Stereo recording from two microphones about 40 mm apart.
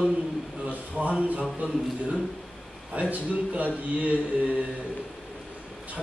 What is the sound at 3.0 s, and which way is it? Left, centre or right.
Speech, right.